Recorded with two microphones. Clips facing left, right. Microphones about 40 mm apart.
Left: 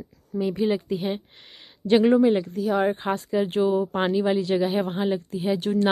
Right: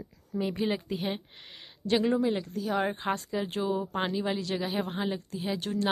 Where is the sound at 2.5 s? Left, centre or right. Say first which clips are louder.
Left 7 dB; centre.